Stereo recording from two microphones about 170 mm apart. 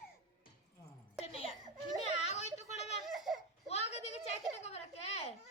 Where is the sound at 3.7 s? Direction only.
40° left (ahead or behind).